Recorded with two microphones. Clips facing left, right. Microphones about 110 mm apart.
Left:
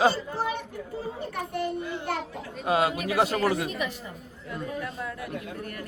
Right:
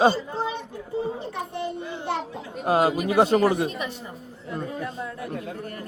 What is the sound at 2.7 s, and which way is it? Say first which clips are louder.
Speech: right 4 dB; 35° right (ahead or behind).